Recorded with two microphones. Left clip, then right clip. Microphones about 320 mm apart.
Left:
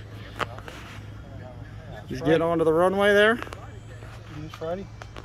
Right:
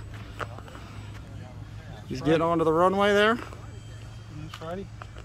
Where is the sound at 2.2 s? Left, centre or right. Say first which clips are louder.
Left 2 dB; centre.